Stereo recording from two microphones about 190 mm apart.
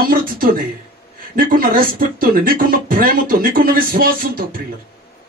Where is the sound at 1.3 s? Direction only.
50° right (ahead or behind).